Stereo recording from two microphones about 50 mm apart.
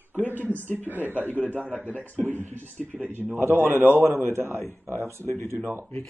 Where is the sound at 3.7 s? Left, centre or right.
Right.